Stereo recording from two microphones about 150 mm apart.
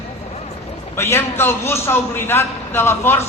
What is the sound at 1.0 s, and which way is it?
A man's voice, 15° left (ahead or behind).